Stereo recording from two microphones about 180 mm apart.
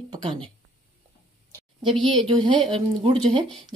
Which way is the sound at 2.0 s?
25° right (ahead or behind).